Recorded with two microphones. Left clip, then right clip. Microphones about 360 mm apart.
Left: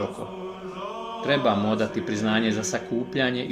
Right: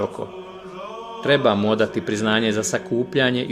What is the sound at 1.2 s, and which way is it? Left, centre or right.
Speech, right.